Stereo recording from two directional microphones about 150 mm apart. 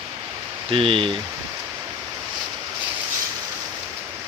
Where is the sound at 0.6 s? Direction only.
35° right (ahead or behind).